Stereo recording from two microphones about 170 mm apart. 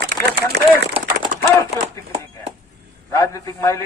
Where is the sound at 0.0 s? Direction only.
70° right (ahead or behind).